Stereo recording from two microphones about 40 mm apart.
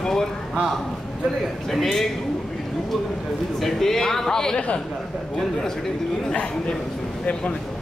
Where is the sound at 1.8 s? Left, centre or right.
Centre.